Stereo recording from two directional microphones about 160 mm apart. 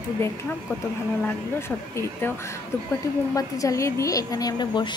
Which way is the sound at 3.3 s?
20° left (ahead or behind).